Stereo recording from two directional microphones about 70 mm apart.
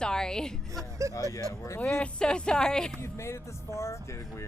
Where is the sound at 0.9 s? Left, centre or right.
Right.